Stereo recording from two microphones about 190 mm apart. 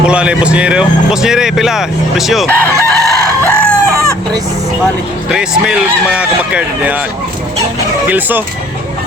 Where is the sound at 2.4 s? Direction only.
10° left (ahead or behind).